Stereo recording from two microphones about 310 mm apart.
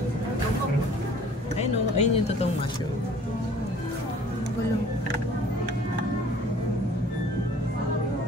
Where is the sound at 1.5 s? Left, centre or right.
Left.